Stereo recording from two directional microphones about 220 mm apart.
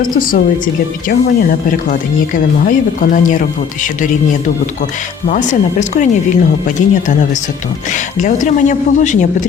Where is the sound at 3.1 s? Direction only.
35° left (ahead or behind).